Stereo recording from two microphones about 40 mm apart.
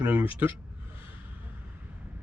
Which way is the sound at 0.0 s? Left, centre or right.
Right.